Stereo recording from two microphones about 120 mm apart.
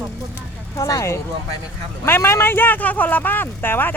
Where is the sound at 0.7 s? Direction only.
30° left (ahead or behind).